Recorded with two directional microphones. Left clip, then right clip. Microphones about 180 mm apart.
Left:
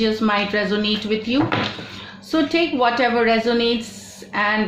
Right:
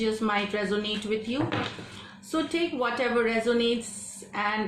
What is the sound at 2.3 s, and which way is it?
A woman's voice, 35° left (ahead or behind).